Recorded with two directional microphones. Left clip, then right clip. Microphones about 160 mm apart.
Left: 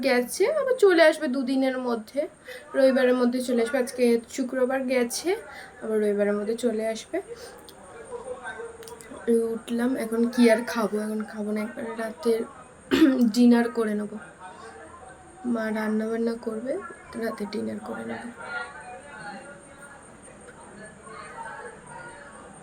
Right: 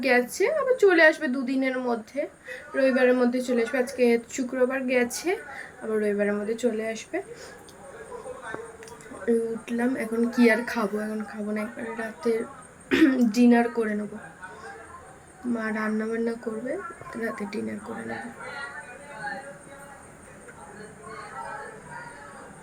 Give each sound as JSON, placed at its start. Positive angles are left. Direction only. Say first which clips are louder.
{"t": 0.0, "sound": "a woman's voice", "louder": "even", "side_deg": 15}
{"t": 9.2, "sound": "a woman's voice", "louder": "left 1 dB", "side_deg": 15}
{"t": 15.5, "sound": "a woman's voice", "louder": "left 1 dB", "side_deg": 15}